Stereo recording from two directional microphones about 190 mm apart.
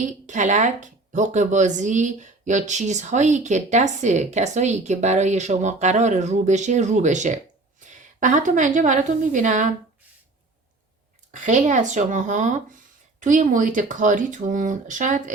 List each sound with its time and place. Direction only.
0.0 s a woman's voice: 40° right (ahead or behind)
11.3 s speech: 40° right (ahead or behind)